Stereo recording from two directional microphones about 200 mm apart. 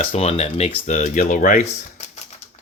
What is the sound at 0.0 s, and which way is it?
Speech, 30° left (ahead or behind).